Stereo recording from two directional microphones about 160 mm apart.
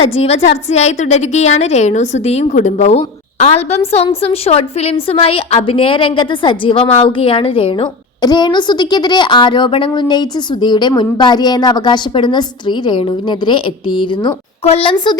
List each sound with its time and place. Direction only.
0.1 s a woman's voice: 40° left (ahead or behind)
14.6 s a woman's voice: 40° left (ahead or behind)